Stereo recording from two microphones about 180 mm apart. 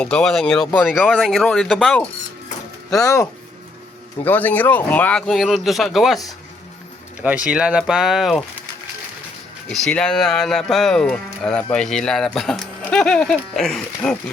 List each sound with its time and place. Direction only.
0.0 s speech: 5° left (ahead or behind)
3.0 s speech: 20° left (ahead or behind); by 8.4 s centre (ahead or behind)
9.7 s speech: 5° left (ahead or behind)